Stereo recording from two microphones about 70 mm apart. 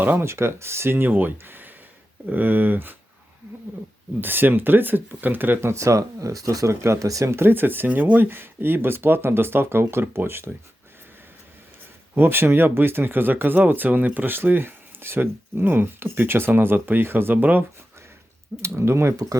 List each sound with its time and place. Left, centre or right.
0.0 s speech: right
4.2 s speech: right
5.5 s speech: right
12.1 s speech: right
18.6 s speech: right
19.1 s speech: right